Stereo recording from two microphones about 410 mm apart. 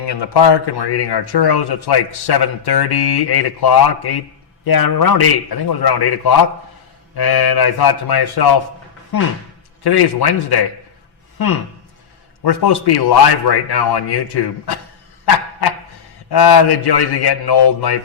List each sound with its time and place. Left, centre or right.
0.0 s speech: left
12.4 s speech: left
16.3 s speech: left